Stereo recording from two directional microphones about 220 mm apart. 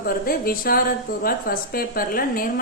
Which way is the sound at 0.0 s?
40° left (ahead or behind).